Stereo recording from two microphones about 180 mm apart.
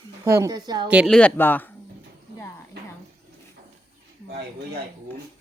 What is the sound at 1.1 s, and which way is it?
Speech, 10° left (ahead or behind).